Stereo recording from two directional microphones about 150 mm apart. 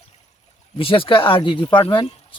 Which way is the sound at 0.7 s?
35° left (ahead or behind).